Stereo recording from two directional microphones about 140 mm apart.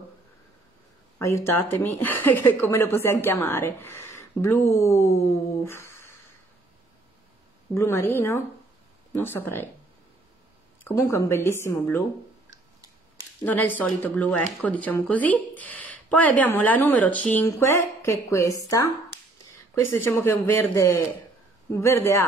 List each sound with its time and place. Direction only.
1.1 s speech: 20° left (ahead or behind)
5.7 s a sound: 20° left (ahead or behind)
7.7 s speech: 15° left (ahead or behind)
10.8 s speech: 20° left (ahead or behind)
13.5 s a woman's voice: 10° left (ahead or behind)